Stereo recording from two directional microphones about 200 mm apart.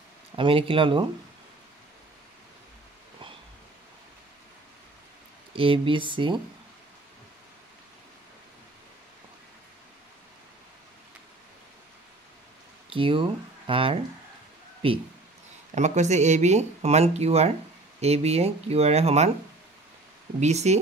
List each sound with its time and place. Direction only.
0.4 s speech: 25° right (ahead or behind)
5.5 s speech: 25° right (ahead or behind)
12.9 s a man's voice: 25° right (ahead or behind)
20.3 s speech: 35° right (ahead or behind)